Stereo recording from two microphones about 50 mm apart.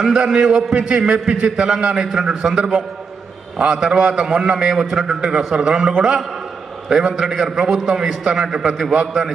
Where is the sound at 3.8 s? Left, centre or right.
Centre.